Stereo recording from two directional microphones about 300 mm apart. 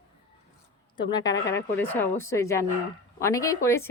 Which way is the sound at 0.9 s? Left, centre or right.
Centre.